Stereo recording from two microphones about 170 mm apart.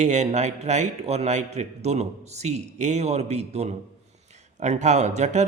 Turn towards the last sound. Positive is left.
turn(degrees=-45)  # may be behind; listen again after turning